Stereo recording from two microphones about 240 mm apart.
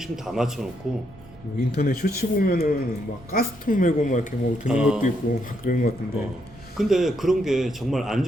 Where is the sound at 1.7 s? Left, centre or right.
Left.